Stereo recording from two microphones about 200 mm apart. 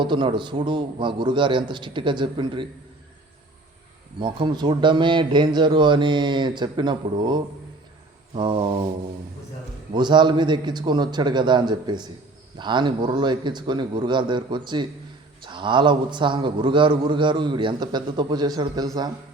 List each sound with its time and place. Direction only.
0.0 s a man's voice: 25° right (ahead or behind)
4.2 s a man's voice: 25° right (ahead or behind)
9.9 s a man's voice: 20° right (ahead or behind)